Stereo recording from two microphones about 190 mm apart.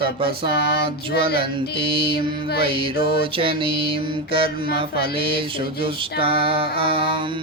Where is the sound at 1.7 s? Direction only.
30° right (ahead or behind).